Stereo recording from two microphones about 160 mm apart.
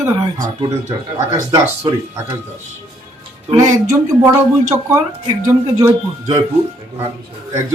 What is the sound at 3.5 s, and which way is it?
Speech, 20° right (ahead or behind).